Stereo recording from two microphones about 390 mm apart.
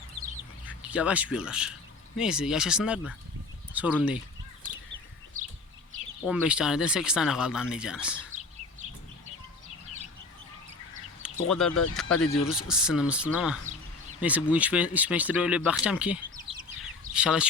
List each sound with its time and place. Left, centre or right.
0.6 s speech: centre
5.4 s chicken: centre
6.2 s speech: centre
11.2 s speech: centre
12.0 s speech: left
12.5 s speech: centre